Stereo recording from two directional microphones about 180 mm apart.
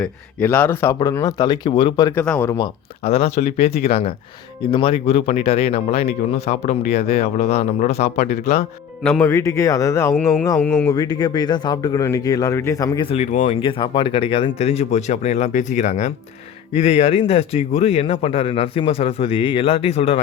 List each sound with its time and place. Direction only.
0.0 s speech: 10° left (ahead or behind)
2.2 s speech: 5° left (ahead or behind)
3.0 s speech: 35° left (ahead or behind)
9.0 s speech: 5° left (ahead or behind)
9.3 s speech: 15° left (ahead or behind)
10.6 s speech: 5° left (ahead or behind)
10.9 s speech: 20° left (ahead or behind)
13.1 s speech: 40° left (ahead or behind)
13.6 s speech: 30° left (ahead or behind)